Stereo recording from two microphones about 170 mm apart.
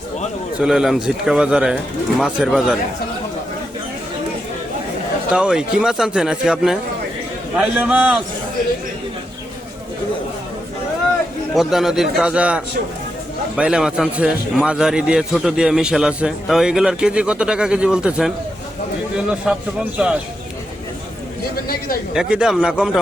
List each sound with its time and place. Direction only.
0.6 s a man's voice: 5° right (ahead or behind)
5.3 s a man's voice: 5° right (ahead or behind)
11.5 s a man's voice: centre (ahead or behind)
21.5 s speech: 60° left (ahead or behind)
22.1 s a man's voice: 5° right (ahead or behind)